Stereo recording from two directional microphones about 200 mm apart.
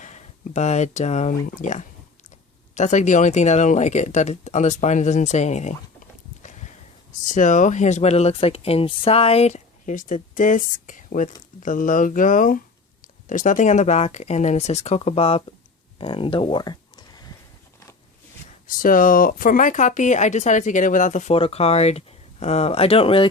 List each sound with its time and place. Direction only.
0.0 s speech: 35° left (ahead or behind)
7.1 s speech: 40° left (ahead or behind)
16.0 s a sound: 25° left (ahead or behind)
18.7 s speech: 45° left (ahead or behind); by 23.3 s 25° left (ahead or behind)